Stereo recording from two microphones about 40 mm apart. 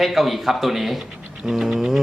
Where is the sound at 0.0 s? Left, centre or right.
Centre.